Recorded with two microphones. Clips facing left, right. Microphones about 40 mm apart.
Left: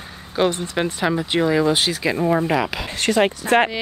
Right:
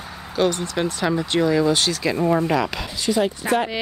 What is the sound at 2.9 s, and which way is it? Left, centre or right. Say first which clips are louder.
Speech: left 3 dB; left.